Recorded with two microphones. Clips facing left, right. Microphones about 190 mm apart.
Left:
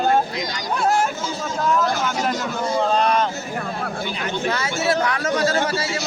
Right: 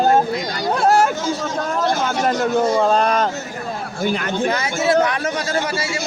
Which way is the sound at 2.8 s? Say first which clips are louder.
Right 2 dB; 45° right (ahead or behind).